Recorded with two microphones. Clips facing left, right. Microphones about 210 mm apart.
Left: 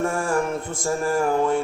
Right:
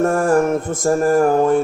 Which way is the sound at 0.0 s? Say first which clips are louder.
Right 8 dB; 45° right (ahead or behind).